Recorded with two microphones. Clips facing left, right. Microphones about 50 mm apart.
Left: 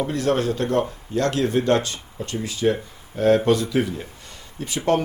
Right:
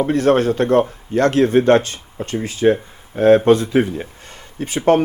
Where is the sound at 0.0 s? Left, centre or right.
Right.